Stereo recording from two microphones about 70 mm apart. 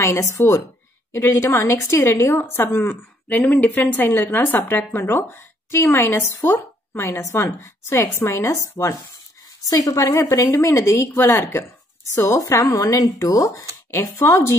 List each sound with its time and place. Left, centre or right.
0.0 s a woman's voice: left
7.2 s a woman's voice: left
12.1 s a woman's voice: left
14.2 s a woman's voice: left